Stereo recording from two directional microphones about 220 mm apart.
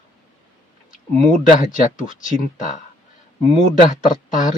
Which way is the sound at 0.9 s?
35° left (ahead or behind).